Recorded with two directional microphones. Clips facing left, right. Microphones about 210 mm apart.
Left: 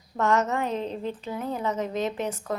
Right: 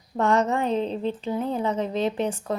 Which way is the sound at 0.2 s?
30° right (ahead or behind).